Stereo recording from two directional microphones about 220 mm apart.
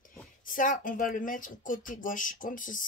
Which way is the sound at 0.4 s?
40° left (ahead or behind).